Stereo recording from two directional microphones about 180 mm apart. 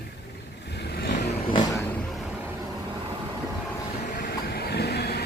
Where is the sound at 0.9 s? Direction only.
55° left (ahead or behind).